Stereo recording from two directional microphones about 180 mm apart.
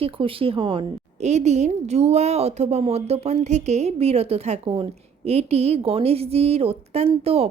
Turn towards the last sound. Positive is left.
turn(degrees=-35)  # may be behind; listen again after turning